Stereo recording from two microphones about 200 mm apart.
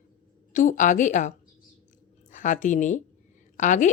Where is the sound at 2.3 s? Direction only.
40° left (ahead or behind).